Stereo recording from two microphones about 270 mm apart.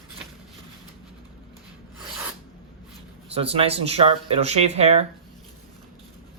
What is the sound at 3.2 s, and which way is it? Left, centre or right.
Speech, right.